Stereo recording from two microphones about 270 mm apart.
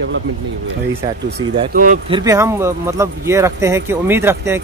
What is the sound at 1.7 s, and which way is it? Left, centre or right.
Speech, right.